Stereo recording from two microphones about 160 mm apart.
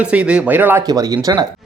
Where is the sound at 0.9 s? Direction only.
25° right (ahead or behind).